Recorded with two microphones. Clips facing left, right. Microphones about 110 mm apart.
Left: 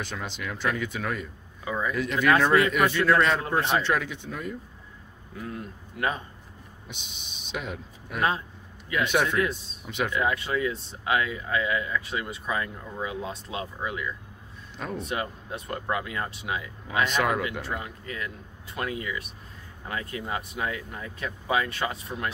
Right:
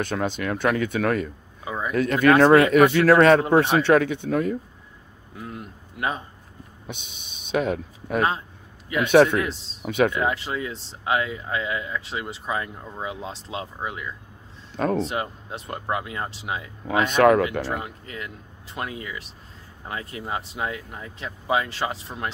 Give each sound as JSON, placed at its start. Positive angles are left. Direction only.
{"t": 0.0, "sound": "speech", "side_deg": -55}
{"t": 1.6, "sound": "a sound", "side_deg": -20}
{"t": 1.9, "sound": "speech", "side_deg": -50}
{"t": 5.4, "sound": "speech", "side_deg": -25}
{"t": 7.6, "sound": "speech", "side_deg": -50}
{"t": 9.1, "sound": "a man's voice", "side_deg": -70}
{"t": 9.4, "sound": "speech", "side_deg": -25}
{"t": 9.8, "sound": "speech", "side_deg": -60}
{"t": 10.2, "sound": "speech", "side_deg": -25}
{"t": 14.8, "sound": "a man's voice", "side_deg": -70}
{"t": 15.0, "sound": "speech", "side_deg": -25}
{"t": 17.0, "sound": "speech", "side_deg": -55}
{"t": 17.7, "sound": "speech", "side_deg": -30}